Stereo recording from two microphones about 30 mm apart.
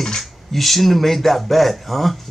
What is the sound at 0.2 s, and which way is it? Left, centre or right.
Speech, centre.